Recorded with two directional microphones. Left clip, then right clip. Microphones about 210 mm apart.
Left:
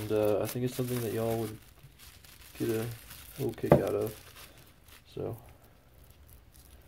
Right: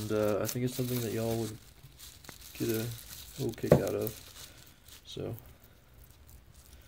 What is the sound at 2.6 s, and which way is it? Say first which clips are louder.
Speech: left 1 dB; 10° left (ahead or behind).